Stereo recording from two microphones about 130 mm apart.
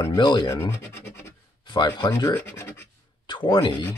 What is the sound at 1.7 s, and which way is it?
Speech, 35° left (ahead or behind).